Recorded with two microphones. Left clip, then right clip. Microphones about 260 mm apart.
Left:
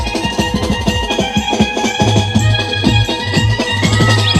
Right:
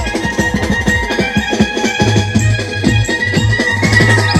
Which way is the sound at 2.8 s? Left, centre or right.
Centre.